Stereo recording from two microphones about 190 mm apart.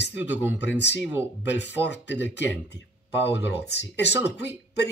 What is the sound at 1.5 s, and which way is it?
Speech, 65° left (ahead or behind).